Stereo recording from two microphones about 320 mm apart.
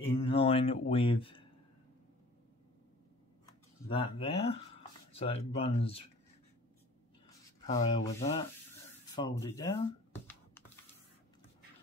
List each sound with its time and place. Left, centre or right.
0.1 s speech: centre
3.9 s speech: centre
7.6 s speech: centre
9.1 s computer keyboard: centre